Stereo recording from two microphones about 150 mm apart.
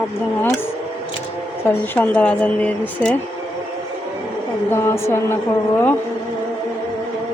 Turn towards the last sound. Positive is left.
turn(degrees=15)  # may be behind; listen again after turning